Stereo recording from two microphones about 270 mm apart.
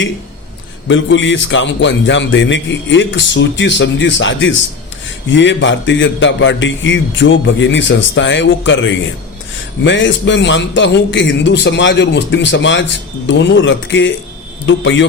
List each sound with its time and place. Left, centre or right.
0.9 s a man's voice: left